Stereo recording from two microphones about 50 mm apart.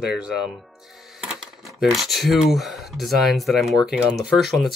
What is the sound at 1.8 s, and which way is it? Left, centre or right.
Speech, centre.